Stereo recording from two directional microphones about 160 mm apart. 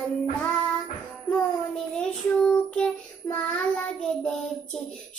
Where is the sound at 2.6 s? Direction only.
5° left (ahead or behind).